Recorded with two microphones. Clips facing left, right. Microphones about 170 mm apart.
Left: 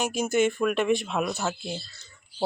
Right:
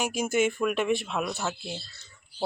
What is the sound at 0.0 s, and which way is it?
Speech, 10° right (ahead or behind).